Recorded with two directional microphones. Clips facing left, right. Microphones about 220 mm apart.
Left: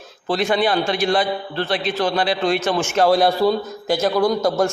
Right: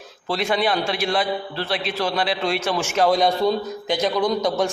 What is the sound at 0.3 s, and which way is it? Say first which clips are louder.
A man's voice: left 3 dB; centre (ahead or behind).